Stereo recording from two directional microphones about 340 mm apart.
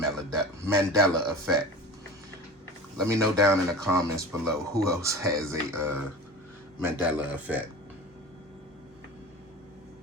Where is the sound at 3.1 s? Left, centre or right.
Centre.